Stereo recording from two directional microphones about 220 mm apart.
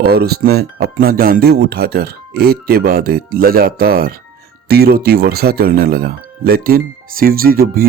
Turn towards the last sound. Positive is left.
turn(degrees=-40)  # may be behind; listen again after turning